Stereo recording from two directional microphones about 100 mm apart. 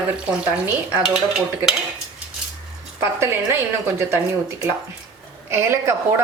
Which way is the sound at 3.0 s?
25° right (ahead or behind).